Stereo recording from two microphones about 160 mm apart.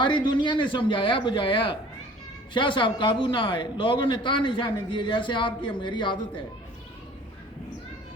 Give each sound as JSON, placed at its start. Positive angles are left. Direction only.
{"t": 0.0, "sound": "a man's voice", "side_deg": 30}